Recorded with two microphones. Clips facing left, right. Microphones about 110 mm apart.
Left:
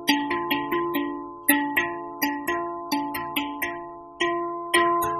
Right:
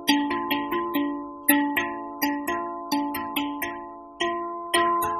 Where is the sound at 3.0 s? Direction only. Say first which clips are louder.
Right 1 dB; 15° right (ahead or behind).